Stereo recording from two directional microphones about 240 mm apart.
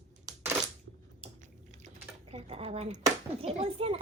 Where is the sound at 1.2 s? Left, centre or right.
Right.